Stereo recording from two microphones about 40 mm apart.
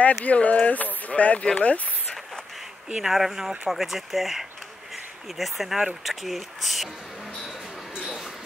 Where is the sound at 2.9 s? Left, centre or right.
Centre.